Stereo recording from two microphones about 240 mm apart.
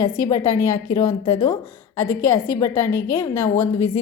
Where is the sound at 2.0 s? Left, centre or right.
Centre.